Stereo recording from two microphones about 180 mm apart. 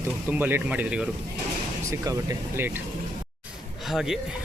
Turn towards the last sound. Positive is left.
turn(degrees=0)  # may be behind; listen again after turning